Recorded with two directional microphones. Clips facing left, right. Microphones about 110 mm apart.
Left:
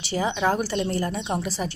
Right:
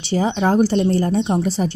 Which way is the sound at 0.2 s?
30° right (ahead or behind).